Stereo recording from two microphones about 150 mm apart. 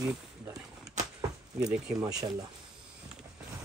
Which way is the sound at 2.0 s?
25° right (ahead or behind).